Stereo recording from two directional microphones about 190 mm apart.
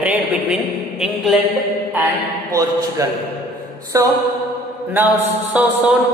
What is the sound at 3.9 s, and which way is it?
Speech, 15° right (ahead or behind).